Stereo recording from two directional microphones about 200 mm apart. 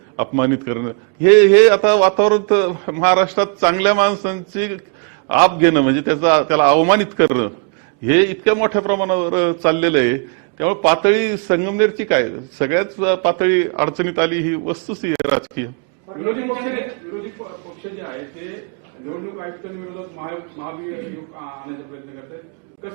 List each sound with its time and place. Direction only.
0.2 s a man's voice: 15° right (ahead or behind)
16.2 s a man's voice: 15° right (ahead or behind)
20.2 s a man's voice: 20° right (ahead or behind)